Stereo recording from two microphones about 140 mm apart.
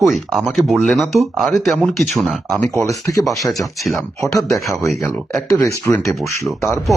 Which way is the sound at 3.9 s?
20° left (ahead or behind).